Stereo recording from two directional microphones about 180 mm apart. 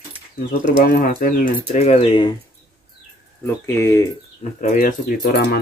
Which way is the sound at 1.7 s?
40° left (ahead or behind).